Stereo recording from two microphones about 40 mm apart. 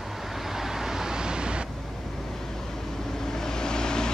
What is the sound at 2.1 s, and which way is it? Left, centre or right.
Vehicle, centre.